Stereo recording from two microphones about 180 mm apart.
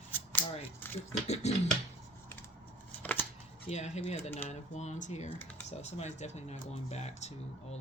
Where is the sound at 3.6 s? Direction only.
35° left (ahead or behind).